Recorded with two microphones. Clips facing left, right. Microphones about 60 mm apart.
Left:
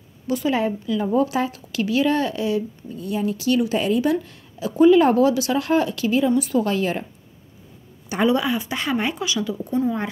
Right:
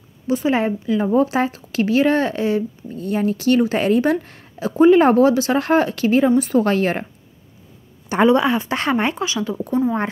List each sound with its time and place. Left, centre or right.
0.3 s a woman's voice: right
8.1 s speech: right
8.9 s a woman's voice: right